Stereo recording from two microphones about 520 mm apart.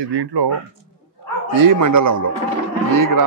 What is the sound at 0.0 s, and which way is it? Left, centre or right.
Speech, right.